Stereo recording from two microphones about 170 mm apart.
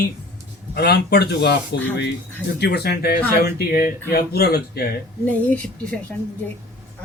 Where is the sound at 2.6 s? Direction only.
75° left (ahead or behind).